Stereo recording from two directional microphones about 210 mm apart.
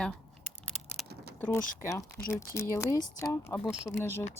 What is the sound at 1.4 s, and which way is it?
Speech, 10° left (ahead or behind).